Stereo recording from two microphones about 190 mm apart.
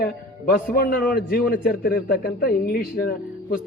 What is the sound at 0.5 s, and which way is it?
A man's voice, 50° left (ahead or behind).